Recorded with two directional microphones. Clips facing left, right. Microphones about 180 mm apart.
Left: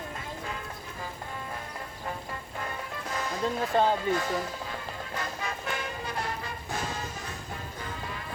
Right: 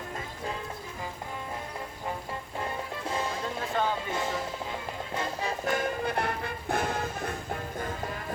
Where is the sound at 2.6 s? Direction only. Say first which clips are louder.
Right 3 dB; 25° right (ahead or behind); by 8.2 s 45° right (ahead or behind).